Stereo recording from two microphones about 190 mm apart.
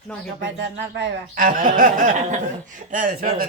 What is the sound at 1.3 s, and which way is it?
Speech, 45° right (ahead or behind).